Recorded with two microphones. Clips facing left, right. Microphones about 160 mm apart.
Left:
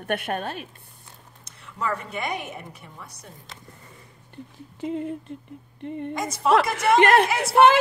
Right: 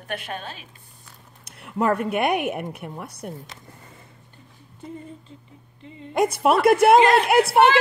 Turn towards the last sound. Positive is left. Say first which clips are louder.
# right 1 dB
turn(degrees=-60)  # may be behind; listen again after turning